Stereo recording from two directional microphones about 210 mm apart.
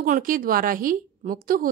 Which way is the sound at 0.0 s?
40° right (ahead or behind).